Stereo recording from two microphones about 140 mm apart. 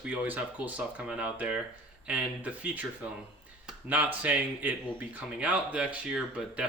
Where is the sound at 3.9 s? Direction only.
10° right (ahead or behind).